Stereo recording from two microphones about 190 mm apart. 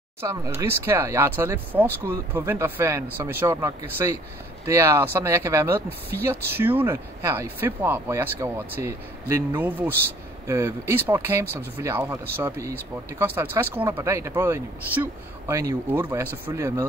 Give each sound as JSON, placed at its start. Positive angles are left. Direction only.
{"t": 0.2, "sound": "speech", "side_deg": -15}